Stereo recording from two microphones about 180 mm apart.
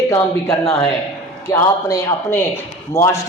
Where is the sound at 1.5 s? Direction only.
15° left (ahead or behind).